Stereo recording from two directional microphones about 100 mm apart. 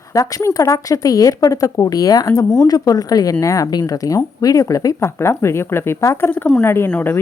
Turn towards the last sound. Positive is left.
turn(degrees=20)  # may be behind; listen again after turning